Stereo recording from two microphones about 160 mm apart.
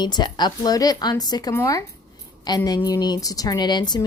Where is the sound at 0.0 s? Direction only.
25° left (ahead or behind).